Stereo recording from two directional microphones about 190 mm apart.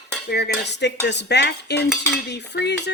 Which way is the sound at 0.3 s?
60° left (ahead or behind).